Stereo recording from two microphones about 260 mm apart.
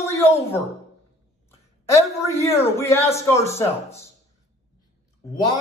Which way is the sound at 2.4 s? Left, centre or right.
Centre.